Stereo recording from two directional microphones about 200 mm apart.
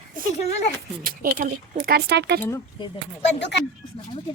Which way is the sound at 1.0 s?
45° right (ahead or behind).